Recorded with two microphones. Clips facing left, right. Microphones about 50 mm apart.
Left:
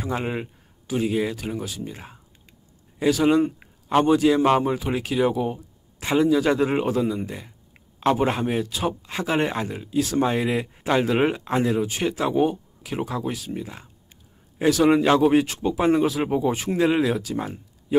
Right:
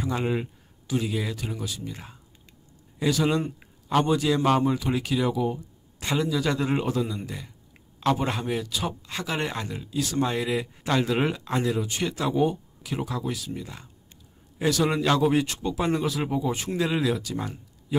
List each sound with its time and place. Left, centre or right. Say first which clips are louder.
0.0 s speech: even; left
3.0 s a man's voice: left 5 dB; left
4.0 s speech: left 6 dB; left
5.9 s a man's voice: left 7 dB; centre; by 16.5 s left
16.5 s speech: left 6 dB; left